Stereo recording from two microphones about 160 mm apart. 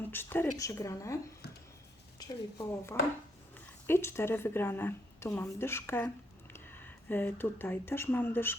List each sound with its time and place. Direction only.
0.1 s a woman's voice: 15° left (ahead or behind)